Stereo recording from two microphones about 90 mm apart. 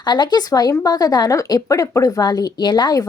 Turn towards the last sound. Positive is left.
turn(degrees=45)  # may be behind; listen again after turning